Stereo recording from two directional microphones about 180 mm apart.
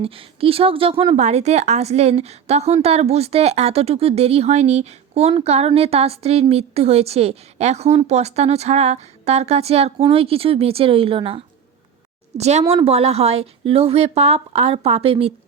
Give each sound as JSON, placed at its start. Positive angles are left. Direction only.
{"t": 0.0, "sound": "speech", "side_deg": -30}